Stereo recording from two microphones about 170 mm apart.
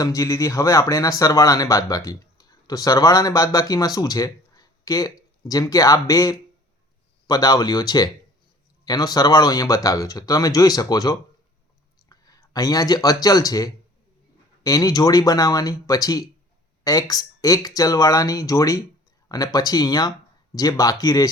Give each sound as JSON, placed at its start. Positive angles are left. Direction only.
{"t": 0.0, "sound": "speech", "side_deg": 20}